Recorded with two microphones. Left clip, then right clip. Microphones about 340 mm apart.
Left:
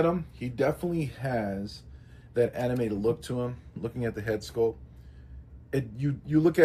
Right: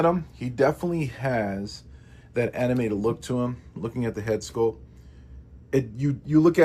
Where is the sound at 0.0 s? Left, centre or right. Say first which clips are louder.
Right 4 dB; centre.